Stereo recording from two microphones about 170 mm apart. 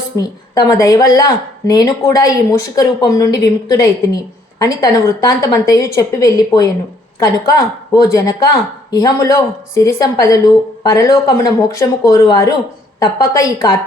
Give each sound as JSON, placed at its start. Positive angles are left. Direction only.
{"t": 0.2, "sound": "speech", "side_deg": 20}